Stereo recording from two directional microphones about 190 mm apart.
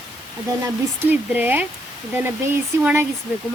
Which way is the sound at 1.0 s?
10° right (ahead or behind).